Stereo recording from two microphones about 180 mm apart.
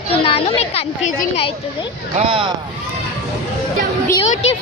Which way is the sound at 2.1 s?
30° right (ahead or behind).